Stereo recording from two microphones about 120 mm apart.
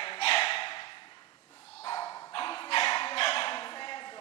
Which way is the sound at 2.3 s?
45° left (ahead or behind).